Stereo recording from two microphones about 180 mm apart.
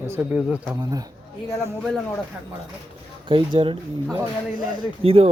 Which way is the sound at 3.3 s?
30° right (ahead or behind).